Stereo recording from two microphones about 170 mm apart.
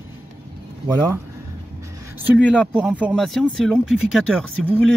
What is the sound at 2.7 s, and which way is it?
Speech, 10° right (ahead or behind).